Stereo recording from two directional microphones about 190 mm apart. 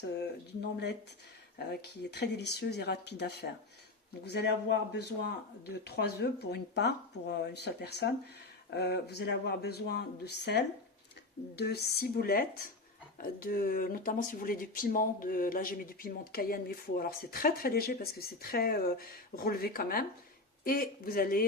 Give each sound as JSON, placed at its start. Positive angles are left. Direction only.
{"t": 1.5, "sound": "speech", "side_deg": 60}